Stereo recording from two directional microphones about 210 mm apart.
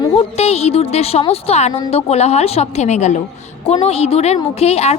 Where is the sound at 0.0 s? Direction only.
30° left (ahead or behind).